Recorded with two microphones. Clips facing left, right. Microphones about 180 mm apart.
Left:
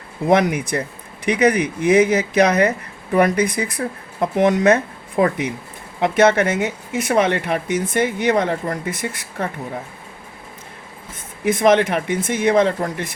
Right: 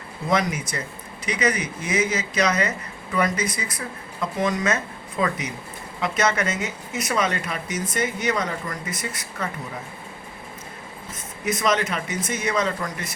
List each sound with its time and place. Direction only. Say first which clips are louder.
0.3 s speech: left 7 dB; 60° left (ahead or behind)
11.4 s speech: left 8 dB; 60° left (ahead or behind)